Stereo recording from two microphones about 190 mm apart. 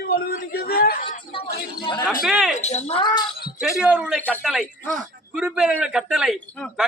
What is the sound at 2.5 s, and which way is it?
Speech, 35° left (ahead or behind).